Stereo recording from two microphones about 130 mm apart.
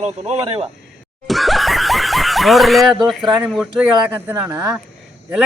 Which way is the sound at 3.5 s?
Centre (ahead or behind).